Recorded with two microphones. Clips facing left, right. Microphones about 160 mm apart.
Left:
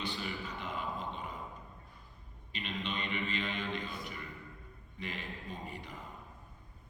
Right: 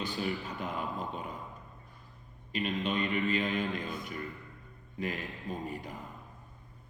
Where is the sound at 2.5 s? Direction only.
45° right (ahead or behind).